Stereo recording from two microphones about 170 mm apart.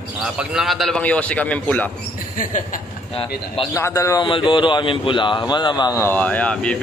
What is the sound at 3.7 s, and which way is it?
A man's voice, 15° left (ahead or behind).